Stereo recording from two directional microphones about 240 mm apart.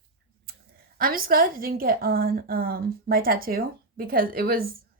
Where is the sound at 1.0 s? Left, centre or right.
Right.